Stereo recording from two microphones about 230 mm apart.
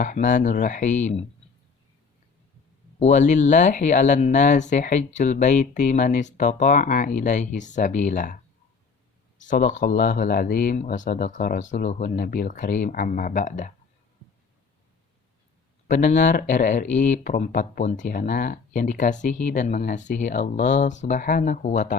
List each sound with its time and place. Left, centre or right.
0.0 s speech: left
3.0 s speech: left
9.5 s speech: left
15.9 s speech: left